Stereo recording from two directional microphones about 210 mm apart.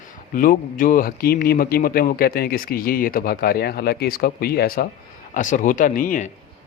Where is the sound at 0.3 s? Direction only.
40° left (ahead or behind).